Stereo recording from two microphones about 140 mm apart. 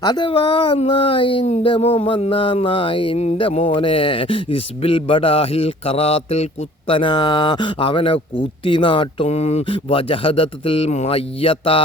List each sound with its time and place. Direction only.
0.0 s speech: 35° left (ahead or behind)